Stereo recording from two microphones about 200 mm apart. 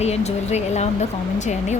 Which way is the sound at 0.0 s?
35° left (ahead or behind).